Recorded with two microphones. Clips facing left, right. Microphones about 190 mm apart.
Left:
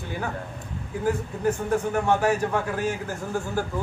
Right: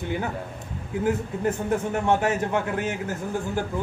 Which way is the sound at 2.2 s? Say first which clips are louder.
Left 1 dB; 20° right (ahead or behind).